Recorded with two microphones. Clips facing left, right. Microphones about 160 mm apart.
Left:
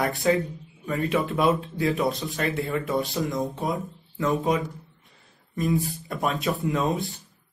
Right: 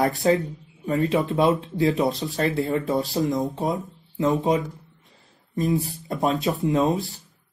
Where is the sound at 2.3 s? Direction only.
25° right (ahead or behind).